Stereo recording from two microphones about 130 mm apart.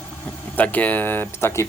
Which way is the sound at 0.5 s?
10° left (ahead or behind).